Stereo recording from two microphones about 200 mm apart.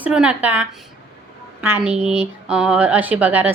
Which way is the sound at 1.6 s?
10° right (ahead or behind).